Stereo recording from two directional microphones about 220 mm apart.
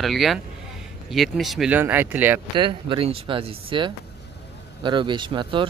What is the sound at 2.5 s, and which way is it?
Speech, 20° right (ahead or behind).